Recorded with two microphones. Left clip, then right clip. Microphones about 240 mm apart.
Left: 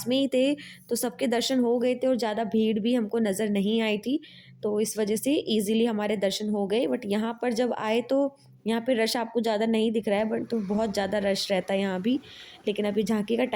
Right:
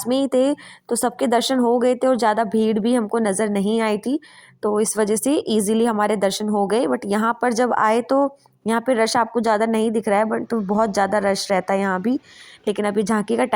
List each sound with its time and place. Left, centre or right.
0.0 s speech: centre